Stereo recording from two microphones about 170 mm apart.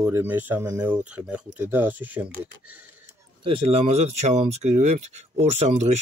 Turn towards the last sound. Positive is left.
turn(degrees=-40)  # may be behind; listen again after turning